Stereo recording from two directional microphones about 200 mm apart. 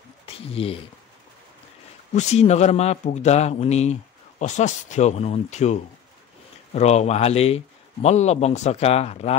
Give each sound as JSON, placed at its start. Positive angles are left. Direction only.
{"t": 0.5, "sound": "speech", "side_deg": 30}
{"t": 2.1, "sound": "speech", "side_deg": 35}